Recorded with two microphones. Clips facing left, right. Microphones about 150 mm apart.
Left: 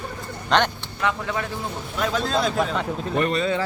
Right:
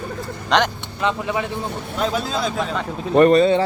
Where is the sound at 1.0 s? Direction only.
15° right (ahead or behind).